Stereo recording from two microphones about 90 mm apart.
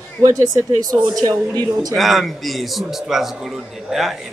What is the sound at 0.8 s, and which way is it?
Speech, 45° right (ahead or behind).